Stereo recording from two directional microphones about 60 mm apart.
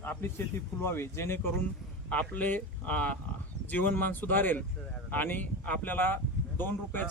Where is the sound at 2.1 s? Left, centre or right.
Left.